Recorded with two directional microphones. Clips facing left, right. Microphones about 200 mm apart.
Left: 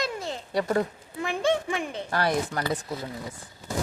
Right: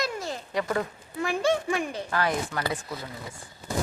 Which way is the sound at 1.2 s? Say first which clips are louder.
Even; 20° left (ahead or behind).